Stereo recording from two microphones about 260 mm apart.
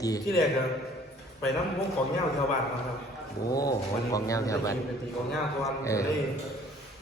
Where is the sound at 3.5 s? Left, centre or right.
Centre.